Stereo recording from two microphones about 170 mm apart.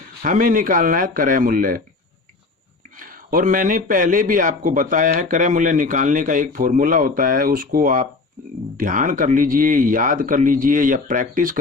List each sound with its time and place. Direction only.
0.2 s speech: 55° right (ahead or behind)
3.0 s a man's voice: 55° right (ahead or behind)